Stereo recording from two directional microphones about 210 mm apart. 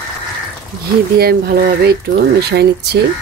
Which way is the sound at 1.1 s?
50° right (ahead or behind).